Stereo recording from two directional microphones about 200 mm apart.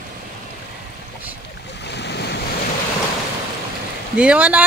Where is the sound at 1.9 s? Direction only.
55° left (ahead or behind).